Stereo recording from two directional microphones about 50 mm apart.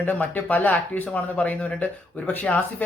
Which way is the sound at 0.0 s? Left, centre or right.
Left.